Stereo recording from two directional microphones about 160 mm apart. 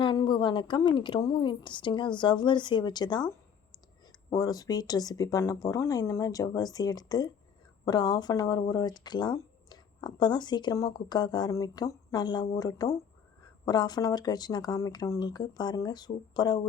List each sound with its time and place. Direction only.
0.0 s speech: 30° left (ahead or behind)
4.3 s speech: 25° left (ahead or behind)